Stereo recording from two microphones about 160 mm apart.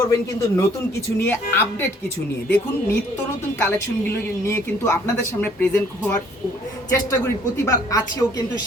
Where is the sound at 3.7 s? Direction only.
15° left (ahead or behind).